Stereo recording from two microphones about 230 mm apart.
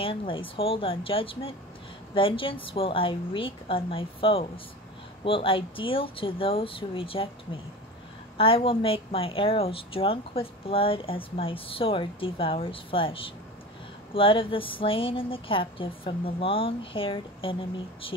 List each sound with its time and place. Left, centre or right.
0.0 s a woman's voice: left
8.4 s a woman's voice: left